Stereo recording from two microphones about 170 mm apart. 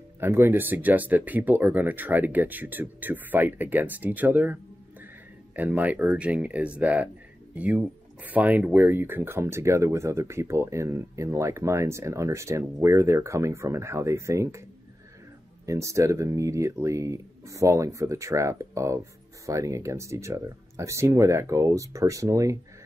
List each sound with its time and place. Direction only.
0.2 s speech: 15° right (ahead or behind)
5.6 s speech: 10° right (ahead or behind)
15.6 s speech: 20° right (ahead or behind)